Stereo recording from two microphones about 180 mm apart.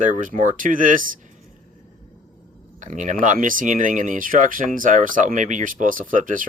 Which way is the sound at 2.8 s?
45° right (ahead or behind).